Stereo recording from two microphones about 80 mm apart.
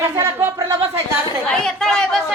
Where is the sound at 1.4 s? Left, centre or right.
Centre.